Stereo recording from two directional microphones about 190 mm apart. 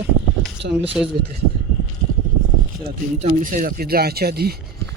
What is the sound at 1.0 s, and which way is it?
Speech, 5° right (ahead or behind).